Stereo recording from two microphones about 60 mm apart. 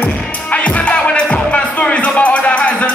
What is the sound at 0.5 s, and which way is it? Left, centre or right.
Music, left.